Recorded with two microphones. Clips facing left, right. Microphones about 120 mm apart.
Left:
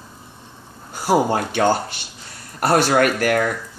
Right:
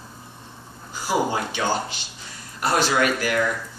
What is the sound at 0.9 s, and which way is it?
Speech, 60° left (ahead or behind).